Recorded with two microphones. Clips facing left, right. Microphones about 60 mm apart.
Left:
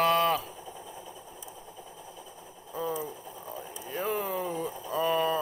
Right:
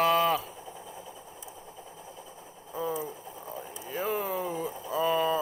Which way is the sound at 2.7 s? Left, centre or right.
Centre.